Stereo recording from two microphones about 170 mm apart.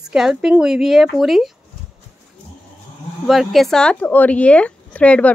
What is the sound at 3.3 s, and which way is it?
Speech, centre (ahead or behind).